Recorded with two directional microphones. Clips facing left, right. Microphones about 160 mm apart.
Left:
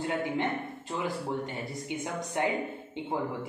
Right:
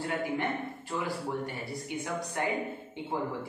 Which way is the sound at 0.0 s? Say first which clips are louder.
Left 2 dB; 20° left (ahead or behind).